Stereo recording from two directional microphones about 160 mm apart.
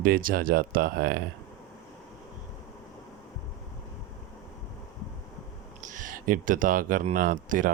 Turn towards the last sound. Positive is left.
turn(degrees=-60)  # may be behind; listen again after turning